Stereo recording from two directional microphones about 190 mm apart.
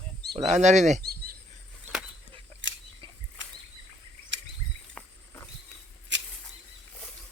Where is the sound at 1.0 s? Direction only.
50° right (ahead or behind).